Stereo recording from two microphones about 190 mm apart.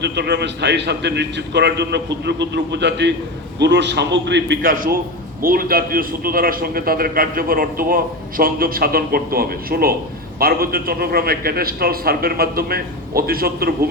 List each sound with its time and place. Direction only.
0.0 s a man's voice: 60° right (ahead or behind)
4.6 s a man's voice: 50° right (ahead or behind)